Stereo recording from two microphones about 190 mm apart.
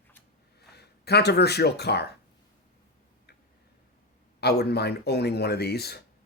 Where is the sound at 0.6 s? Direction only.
60° left (ahead or behind).